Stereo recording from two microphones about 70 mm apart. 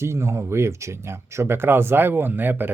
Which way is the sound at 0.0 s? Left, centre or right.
Right.